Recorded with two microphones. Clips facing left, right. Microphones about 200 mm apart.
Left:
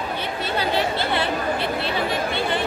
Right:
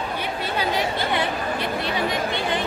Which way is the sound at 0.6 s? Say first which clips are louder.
Left 1 dB; 15° right (ahead or behind).